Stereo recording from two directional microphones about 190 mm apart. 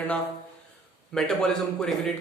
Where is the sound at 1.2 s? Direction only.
5° left (ahead or behind).